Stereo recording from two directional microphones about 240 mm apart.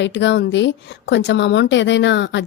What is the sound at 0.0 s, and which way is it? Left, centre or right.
Speech, left.